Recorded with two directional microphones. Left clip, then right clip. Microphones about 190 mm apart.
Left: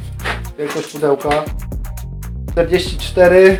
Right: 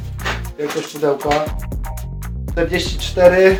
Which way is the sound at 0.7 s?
Centre (ahead or behind).